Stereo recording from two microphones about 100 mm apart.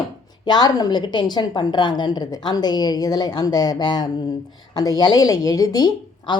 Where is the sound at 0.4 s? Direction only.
45° left (ahead or behind).